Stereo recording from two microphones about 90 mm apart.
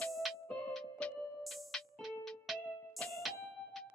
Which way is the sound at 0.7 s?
10° left (ahead or behind).